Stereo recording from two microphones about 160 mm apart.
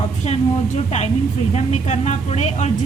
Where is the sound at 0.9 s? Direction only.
45° left (ahead or behind).